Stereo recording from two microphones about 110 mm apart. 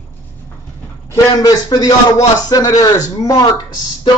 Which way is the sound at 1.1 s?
35° left (ahead or behind).